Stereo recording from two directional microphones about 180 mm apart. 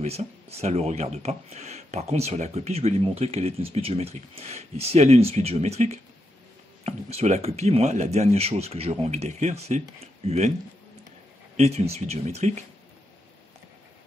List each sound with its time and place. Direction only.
0.0 s speech: 35° right (ahead or behind)
11.5 s speech: 35° right (ahead or behind)